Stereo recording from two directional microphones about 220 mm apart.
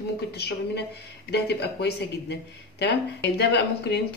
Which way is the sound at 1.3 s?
50° left (ahead or behind).